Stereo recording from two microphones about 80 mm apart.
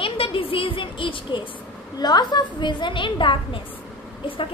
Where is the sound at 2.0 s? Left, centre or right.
Left.